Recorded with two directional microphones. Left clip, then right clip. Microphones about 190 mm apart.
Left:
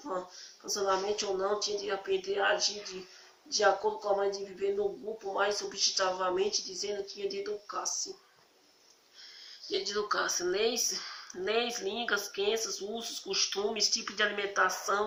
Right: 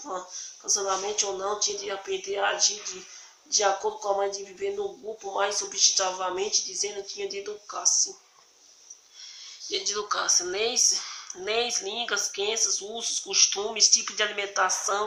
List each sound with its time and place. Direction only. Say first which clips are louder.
0.6 s speech: right 3 dB; 20° left (ahead or behind)
9.6 s speech: right 3 dB; 15° left (ahead or behind)